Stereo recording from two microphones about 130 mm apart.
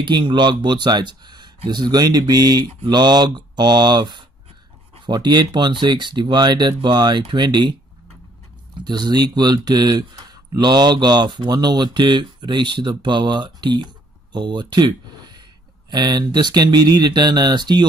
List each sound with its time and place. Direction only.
0.0 s speech: 35° right (ahead or behind)
8.8 s speech: 35° right (ahead or behind)